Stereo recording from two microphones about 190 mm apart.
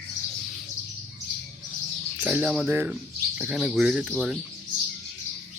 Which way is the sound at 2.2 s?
5° right (ahead or behind).